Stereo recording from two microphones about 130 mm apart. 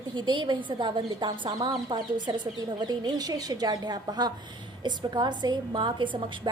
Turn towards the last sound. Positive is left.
turn(degrees=-35)  # may be behind; listen again after turning